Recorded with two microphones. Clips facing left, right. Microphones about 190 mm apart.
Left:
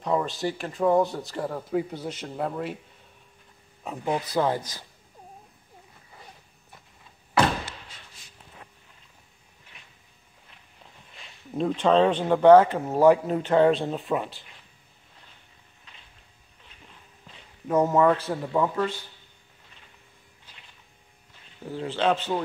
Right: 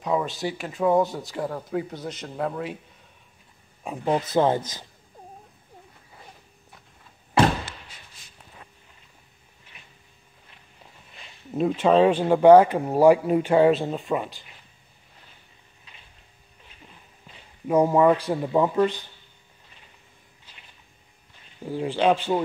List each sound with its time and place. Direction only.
0.0 s speech: centre (ahead or behind)
3.8 s speech: 15° right (ahead or behind)
4.2 s speech: 25° right (ahead or behind)
9.7 s a sound: 5° right (ahead or behind)
11.1 s speech: 5° right (ahead or behind)
17.6 s speech: 10° right (ahead or behind)
21.6 s speech: 15° right (ahead or behind)